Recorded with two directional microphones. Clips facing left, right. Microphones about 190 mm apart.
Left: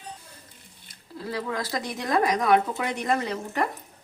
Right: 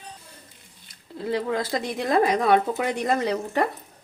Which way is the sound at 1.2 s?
25° right (ahead or behind).